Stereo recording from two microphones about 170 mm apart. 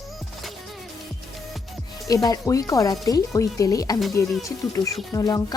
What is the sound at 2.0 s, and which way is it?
Speech, 20° left (ahead or behind).